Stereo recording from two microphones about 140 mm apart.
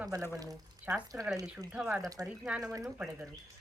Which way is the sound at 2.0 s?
25° right (ahead or behind).